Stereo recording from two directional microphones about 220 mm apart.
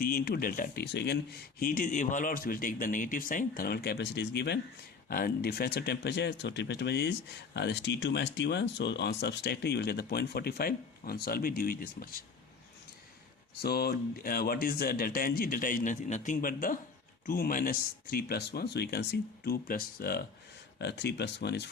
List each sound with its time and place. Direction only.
0.0 s speech: 45° left (ahead or behind)
13.6 s speech: 45° left (ahead or behind)